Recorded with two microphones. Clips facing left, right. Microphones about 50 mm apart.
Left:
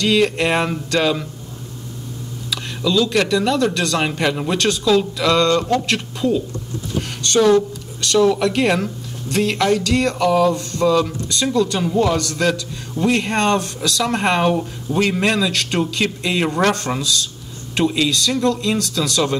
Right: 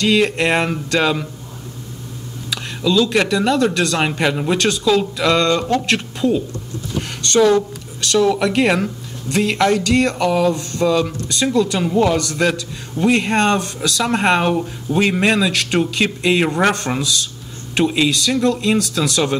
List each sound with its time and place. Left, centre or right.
0.0 s speech: centre
0.9 s speech: centre
2.5 s a sound: centre
3.1 s speech: centre
4.2 s speech: centre
8.4 s speech: centre
11.8 s speech: centre
12.1 s speech: centre
17.8 s speech: right